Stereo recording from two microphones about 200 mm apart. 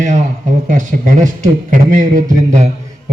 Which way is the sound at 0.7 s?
40° right (ahead or behind).